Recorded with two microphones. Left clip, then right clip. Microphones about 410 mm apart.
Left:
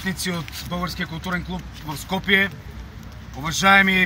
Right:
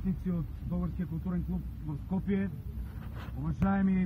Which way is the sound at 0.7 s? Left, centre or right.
Centre.